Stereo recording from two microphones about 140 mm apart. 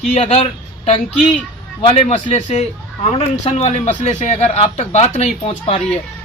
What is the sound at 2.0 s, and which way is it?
A man's voice, 50° left (ahead or behind).